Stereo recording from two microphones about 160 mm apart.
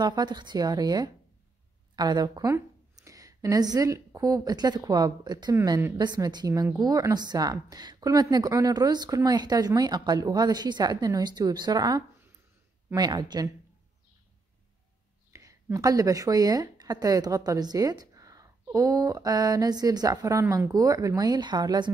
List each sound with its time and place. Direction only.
0.0 s a woman's voice: 25° right (ahead or behind)
5.9 s a woman's voice: 25° right (ahead or behind)
15.3 s a woman's voice: 20° right (ahead or behind)